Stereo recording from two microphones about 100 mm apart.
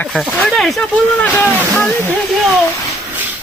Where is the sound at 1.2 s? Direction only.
15° left (ahead or behind).